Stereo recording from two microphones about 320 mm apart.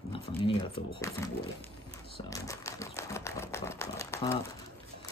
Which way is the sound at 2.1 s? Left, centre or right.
Centre.